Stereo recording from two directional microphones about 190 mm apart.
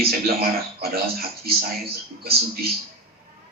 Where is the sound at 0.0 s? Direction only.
55° right (ahead or behind).